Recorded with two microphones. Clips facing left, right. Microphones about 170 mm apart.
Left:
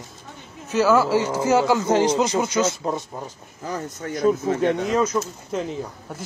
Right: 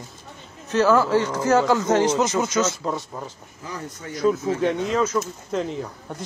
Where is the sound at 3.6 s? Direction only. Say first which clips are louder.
Left 5 dB; 50° left (ahead or behind).